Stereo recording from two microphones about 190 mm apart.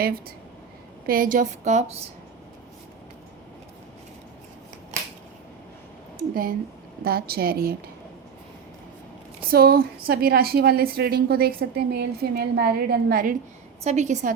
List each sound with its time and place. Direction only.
1.0 s a woman's voice: 50° right (ahead or behind)
6.1 s a woman's voice: 50° right (ahead or behind)
9.5 s a woman's voice: 55° right (ahead or behind)
13.8 s a woman's voice: 35° right (ahead or behind)